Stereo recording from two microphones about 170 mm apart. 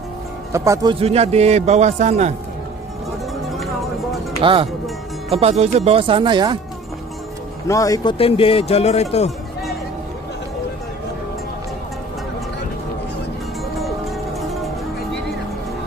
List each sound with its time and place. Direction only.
0.5 s speech: 15° right (ahead or behind)
0.9 s a man's voice: 35° right (ahead or behind)
4.4 s a man's voice: 30° right (ahead or behind)
7.6 s a man's voice: 20° left (ahead or behind); by 9.3 s 40° left (ahead or behind)